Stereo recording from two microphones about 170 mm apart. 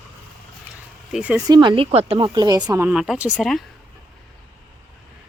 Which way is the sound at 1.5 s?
25° right (ahead or behind).